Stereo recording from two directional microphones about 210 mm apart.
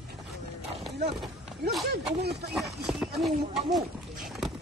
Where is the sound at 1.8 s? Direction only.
50° right (ahead or behind).